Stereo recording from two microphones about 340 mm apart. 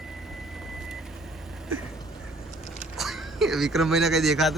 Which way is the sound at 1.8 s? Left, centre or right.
Centre.